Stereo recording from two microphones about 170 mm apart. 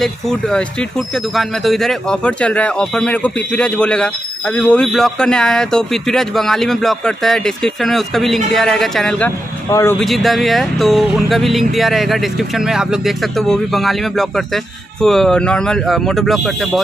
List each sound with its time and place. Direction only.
0.0 s speech: 5° left (ahead or behind)
9.7 s speech: 20° left (ahead or behind)
9.9 s speech: centre (ahead or behind)